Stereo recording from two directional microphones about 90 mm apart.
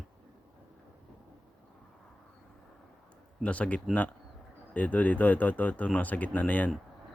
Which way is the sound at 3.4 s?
15° left (ahead or behind).